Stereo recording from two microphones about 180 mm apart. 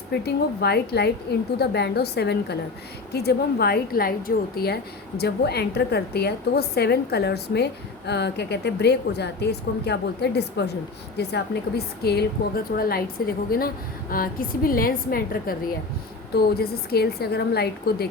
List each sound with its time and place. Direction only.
0.1 s a woman's voice: 65° left (ahead or behind)